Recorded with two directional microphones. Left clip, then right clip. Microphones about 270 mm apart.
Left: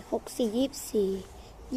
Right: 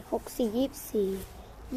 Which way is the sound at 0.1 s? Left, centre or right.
Centre.